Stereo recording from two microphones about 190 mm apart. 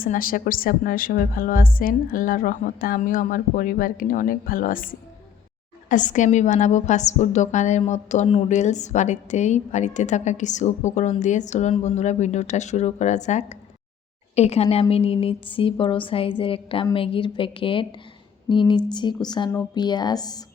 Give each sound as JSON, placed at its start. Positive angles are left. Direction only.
{"t": 0.0, "sound": "a woman's voice", "side_deg": 50}